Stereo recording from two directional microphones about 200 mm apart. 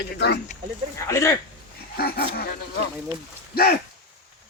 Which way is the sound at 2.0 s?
50° left (ahead or behind).